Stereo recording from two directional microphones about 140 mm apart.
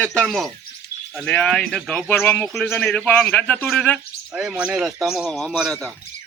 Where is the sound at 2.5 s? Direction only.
Centre (ahead or behind).